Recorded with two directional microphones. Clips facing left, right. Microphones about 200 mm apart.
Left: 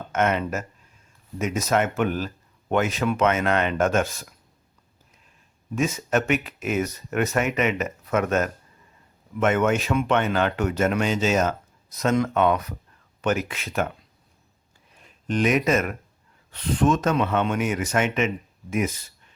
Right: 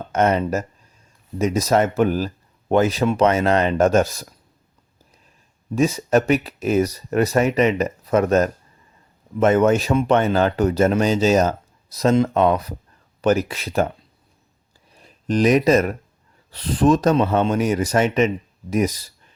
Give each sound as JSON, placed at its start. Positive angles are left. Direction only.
{"t": 0.1, "sound": "speech", "side_deg": -35}
{"t": 5.7, "sound": "speech", "side_deg": -35}
{"t": 14.9, "sound": "speech", "side_deg": -35}